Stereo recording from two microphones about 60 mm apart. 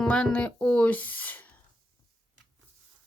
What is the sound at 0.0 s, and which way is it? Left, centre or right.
Speech, centre.